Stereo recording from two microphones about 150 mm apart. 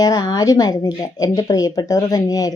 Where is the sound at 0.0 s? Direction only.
25° left (ahead or behind).